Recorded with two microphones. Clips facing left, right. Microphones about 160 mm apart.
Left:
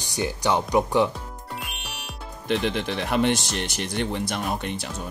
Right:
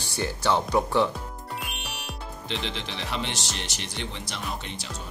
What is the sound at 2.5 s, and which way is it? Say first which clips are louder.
Speech: left 9 dB; 55° left (ahead or behind).